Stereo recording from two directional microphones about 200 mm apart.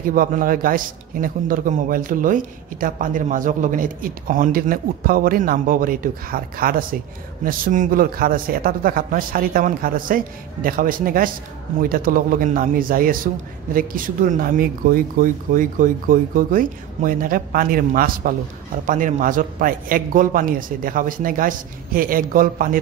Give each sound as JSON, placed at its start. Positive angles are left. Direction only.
{"t": 0.1, "sound": "a man's voice", "side_deg": -45}